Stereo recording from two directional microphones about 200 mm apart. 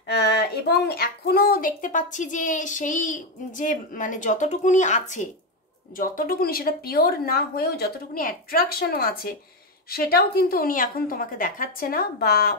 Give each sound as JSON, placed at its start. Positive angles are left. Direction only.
{"t": 0.0, "sound": "speech", "side_deg": 55}